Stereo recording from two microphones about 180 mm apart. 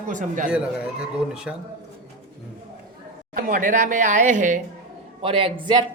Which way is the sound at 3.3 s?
50° right (ahead or behind).